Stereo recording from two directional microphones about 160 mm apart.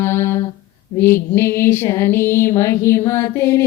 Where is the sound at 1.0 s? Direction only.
15° left (ahead or behind).